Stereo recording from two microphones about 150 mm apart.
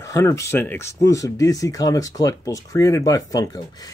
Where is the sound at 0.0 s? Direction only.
20° left (ahead or behind).